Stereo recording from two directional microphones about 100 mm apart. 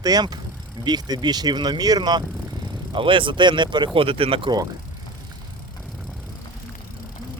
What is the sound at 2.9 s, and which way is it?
Speech, 60° right (ahead or behind).